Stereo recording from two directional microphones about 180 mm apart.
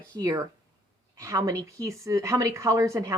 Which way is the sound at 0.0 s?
20° right (ahead or behind).